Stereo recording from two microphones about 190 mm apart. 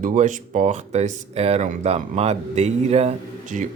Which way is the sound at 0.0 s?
40° right (ahead or behind).